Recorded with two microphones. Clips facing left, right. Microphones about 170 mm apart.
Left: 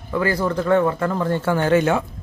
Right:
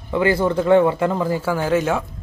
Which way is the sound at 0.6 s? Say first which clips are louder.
Right 3 dB; 10° right (ahead or behind).